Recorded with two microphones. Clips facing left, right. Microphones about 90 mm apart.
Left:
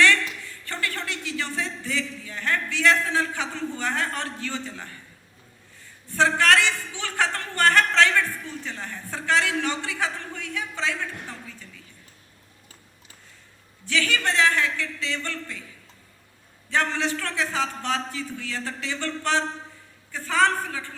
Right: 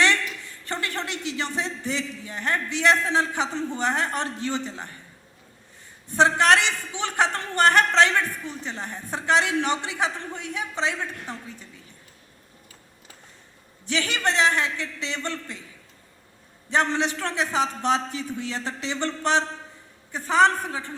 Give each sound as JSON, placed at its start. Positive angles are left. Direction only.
{"t": 0.0, "sound": "speech", "side_deg": -20}
{"t": 6.1, "sound": "a man's voice", "side_deg": -20}
{"t": 13.8, "sound": "a man's voice", "side_deg": -20}
{"t": 16.6, "sound": "a man's voice", "side_deg": -20}